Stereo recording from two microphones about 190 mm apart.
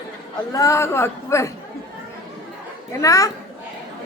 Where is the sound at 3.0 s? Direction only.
15° left (ahead or behind).